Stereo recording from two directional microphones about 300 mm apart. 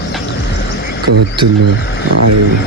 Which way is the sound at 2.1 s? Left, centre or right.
Right.